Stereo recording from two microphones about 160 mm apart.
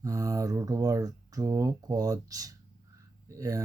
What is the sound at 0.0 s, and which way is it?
Speech, 20° right (ahead or behind).